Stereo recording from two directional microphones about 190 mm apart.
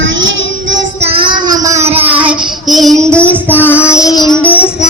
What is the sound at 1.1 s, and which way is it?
Child singing, 25° right (ahead or behind).